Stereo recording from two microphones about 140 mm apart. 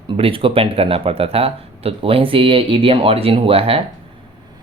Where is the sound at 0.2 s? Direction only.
40° right (ahead or behind).